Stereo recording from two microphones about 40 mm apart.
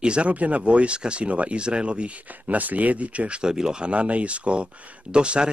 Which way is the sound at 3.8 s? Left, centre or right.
Right.